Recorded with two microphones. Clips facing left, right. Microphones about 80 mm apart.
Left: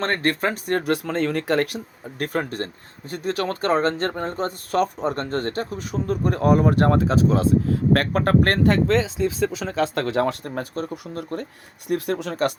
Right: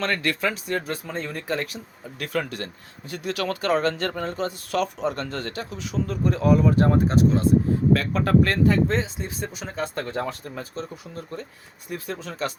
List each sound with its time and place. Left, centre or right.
0.0 s speech: left
2.1 s speech: left
7.7 s speech: left